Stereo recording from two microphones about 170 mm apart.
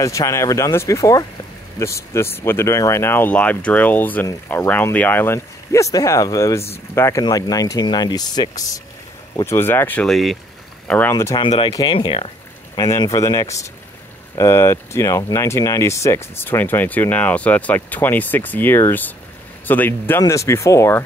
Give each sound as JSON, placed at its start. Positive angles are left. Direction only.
{"t": 0.0, "sound": "speech", "side_deg": 20}
{"t": 10.9, "sound": "speech", "side_deg": 10}